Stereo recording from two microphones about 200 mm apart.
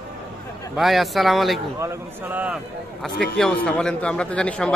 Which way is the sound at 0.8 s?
Centre (ahead or behind).